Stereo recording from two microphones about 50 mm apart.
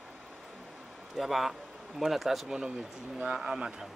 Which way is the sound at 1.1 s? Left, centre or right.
Centre.